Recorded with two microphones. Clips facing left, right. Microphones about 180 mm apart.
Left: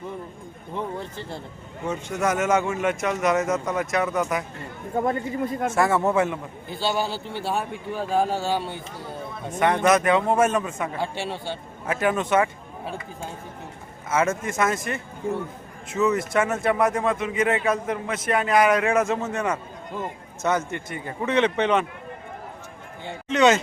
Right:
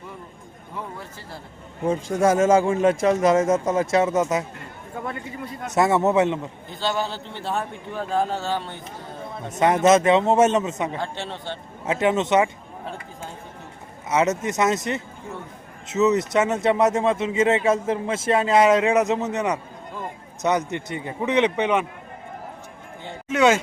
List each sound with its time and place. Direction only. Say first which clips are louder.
1.8 s a man's voice: right 5 dB; 35° right (ahead or behind)
4.9 s speech: left 8 dB; 40° left (ahead or behind)
5.7 s a man's voice: right 4 dB; 20° right (ahead or behind)
6.8 s a man's voice: even; 10° left (ahead or behind)
9.6 s a man's voice: right 3 dB; 25° right (ahead or behind)
11.0 s a man's voice: left 2 dB; 10° left (ahead or behind)
11.9 s a man's voice: right 2 dB; 25° right (ahead or behind)
14.1 s a man's voice: right 2 dB; 20° right (ahead or behind)
23.3 s a man's voice: even; 10° right (ahead or behind)